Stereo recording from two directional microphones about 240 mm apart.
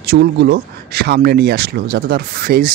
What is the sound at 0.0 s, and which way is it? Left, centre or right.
Speech, right.